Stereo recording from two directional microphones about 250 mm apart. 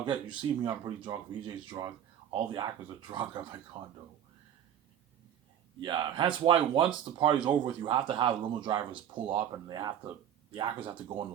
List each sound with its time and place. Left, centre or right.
0.0 s speech: centre
5.8 s speech: centre